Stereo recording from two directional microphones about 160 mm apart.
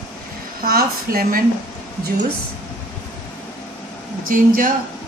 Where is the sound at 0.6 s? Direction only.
70° right (ahead or behind).